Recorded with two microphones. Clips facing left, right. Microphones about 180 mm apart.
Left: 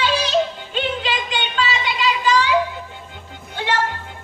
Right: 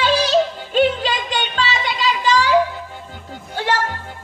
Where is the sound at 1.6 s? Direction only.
40° right (ahead or behind).